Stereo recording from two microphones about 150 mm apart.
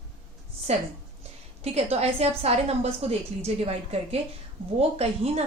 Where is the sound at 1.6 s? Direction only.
45° right (ahead or behind).